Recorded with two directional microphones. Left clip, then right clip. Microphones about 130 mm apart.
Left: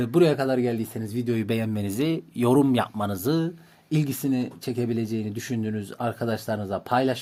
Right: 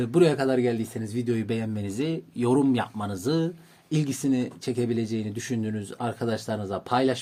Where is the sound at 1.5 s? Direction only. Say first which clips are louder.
Left 3 dB; 55° left (ahead or behind).